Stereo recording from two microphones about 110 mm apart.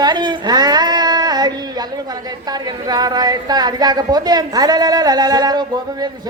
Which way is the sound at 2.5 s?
40° right (ahead or behind).